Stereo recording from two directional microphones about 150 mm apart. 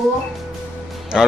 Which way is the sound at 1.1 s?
Centre (ahead or behind).